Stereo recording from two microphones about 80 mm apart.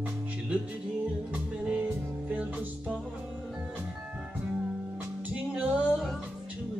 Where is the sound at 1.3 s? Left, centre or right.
Centre.